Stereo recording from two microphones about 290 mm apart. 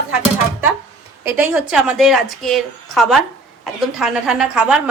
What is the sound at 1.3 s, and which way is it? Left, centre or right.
A woman's voice, centre.